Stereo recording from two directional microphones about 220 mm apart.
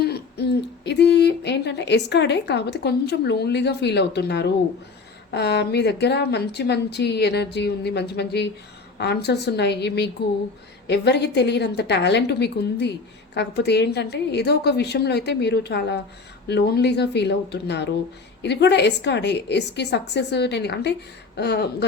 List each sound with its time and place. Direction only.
0.0 s hoot: 45° left (ahead or behind)
5.3 s a woman's voice: 50° left (ahead or behind)